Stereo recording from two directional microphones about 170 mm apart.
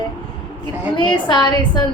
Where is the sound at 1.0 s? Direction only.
30° left (ahead or behind).